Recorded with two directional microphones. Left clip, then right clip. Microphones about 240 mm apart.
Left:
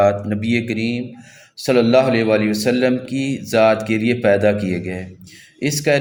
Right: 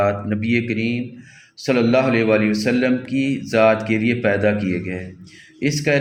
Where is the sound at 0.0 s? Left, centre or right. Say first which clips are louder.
Left 4 dB; left.